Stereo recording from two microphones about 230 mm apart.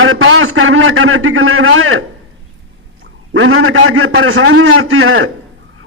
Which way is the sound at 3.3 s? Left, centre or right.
Right.